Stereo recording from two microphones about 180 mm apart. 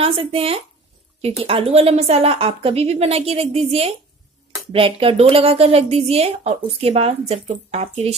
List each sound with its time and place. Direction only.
0.0 s a woman's voice: 30° right (ahead or behind)
4.7 s a woman's voice: 30° right (ahead or behind)